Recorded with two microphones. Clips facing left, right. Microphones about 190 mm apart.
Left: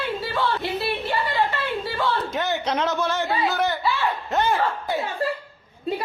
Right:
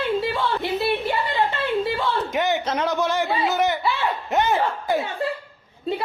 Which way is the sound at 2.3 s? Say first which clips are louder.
Right 2 dB; 15° right (ahead or behind).